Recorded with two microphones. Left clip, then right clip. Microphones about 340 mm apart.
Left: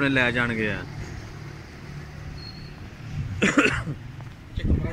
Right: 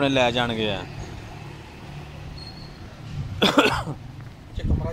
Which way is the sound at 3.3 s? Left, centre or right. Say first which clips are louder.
Right 2 dB; right.